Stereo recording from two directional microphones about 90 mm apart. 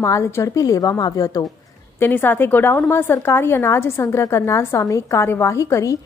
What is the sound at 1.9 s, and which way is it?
A woman's voice, 20° left (ahead or behind).